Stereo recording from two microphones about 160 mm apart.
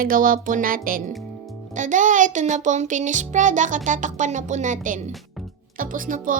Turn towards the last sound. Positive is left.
turn(degrees=-55)  # may be behind; listen again after turning